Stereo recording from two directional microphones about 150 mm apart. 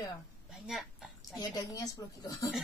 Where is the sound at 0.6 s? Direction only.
Centre (ahead or behind).